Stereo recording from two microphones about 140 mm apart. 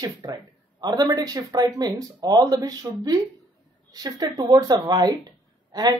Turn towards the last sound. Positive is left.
turn(degrees=-30)  # may be behind; listen again after turning